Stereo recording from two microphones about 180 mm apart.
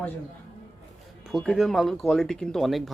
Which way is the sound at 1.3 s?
Centre (ahead or behind).